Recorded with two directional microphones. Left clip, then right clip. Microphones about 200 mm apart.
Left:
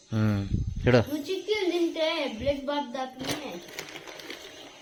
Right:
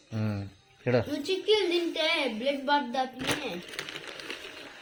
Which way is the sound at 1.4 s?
35° right (ahead or behind).